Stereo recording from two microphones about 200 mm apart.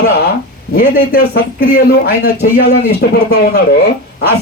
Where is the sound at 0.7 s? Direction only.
45° left (ahead or behind).